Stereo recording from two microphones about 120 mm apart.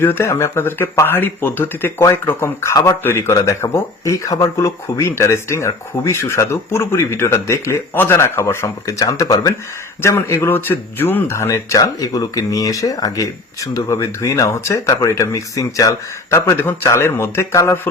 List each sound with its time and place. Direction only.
0.0 s speech: 20° left (ahead or behind)